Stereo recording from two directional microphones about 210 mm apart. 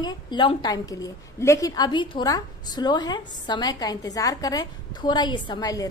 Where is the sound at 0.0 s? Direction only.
20° left (ahead or behind).